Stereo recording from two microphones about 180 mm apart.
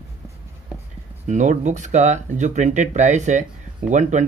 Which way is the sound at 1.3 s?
40° right (ahead or behind).